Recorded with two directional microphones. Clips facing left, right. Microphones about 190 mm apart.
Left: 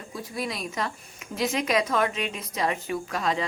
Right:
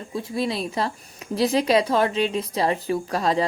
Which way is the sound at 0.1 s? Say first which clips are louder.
Right 7 dB; 25° right (ahead or behind).